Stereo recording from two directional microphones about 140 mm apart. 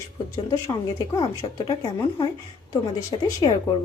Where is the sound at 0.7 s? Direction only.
30° left (ahead or behind).